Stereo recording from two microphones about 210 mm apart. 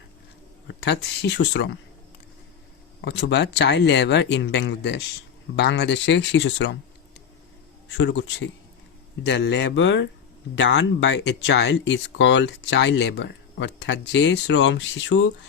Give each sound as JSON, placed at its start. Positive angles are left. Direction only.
{"t": 0.7, "sound": "speech", "side_deg": 55}
{"t": 3.0, "sound": "speech", "side_deg": 55}
{"t": 7.9, "sound": "speech", "side_deg": 60}